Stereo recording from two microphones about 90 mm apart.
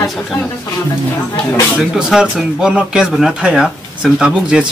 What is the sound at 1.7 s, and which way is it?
Speech, 5° right (ahead or behind).